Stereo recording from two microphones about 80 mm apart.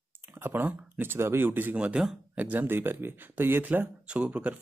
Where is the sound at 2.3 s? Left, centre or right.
Right.